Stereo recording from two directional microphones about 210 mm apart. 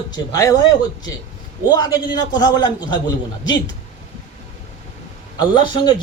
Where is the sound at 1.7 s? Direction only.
20° left (ahead or behind).